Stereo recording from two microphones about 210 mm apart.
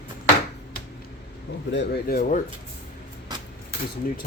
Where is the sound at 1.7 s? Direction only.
55° left (ahead or behind).